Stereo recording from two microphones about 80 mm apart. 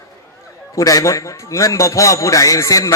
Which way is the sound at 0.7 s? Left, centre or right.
Left.